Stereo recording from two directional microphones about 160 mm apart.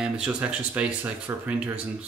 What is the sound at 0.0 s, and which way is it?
Speech, 5° right (ahead or behind).